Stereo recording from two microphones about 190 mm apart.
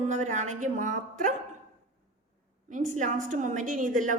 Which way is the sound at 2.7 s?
40° right (ahead or behind).